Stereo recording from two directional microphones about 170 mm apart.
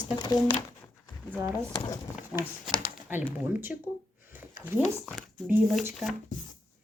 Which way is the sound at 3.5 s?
10° right (ahead or behind).